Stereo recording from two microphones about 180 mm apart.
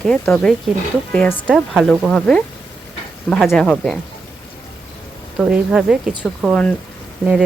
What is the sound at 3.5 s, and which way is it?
Speech, 5° left (ahead or behind).